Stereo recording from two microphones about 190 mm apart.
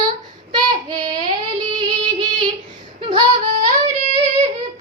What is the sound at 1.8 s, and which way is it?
Music, 25° right (ahead or behind).